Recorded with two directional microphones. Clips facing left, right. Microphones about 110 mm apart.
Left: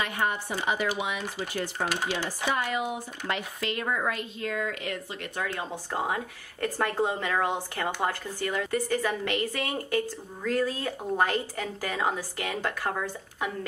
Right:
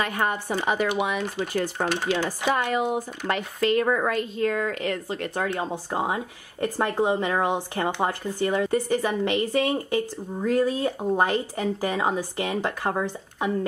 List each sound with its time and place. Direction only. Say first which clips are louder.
0.0 s speech: right 3 dB; 45° right (ahead or behind)
5.9 s speech: even; 20° right (ahead or behind)